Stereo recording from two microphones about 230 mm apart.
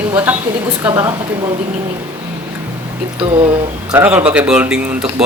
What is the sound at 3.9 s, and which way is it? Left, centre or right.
A woman's voice, centre.